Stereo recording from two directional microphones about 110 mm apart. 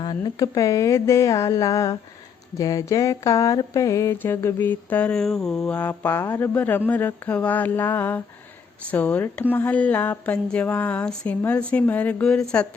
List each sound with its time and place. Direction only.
0.0 s speech: 35° left (ahead or behind)
2.6 s a sound: 30° left (ahead or behind)
8.9 s speech: 15° left (ahead or behind)